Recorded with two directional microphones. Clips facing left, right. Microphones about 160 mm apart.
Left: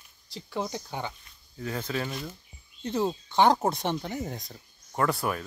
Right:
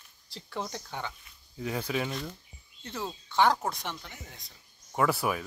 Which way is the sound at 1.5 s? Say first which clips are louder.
Even; 10° right (ahead or behind).